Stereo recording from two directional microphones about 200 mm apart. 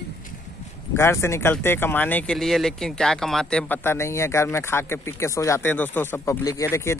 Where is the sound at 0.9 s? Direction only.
15° left (ahead or behind).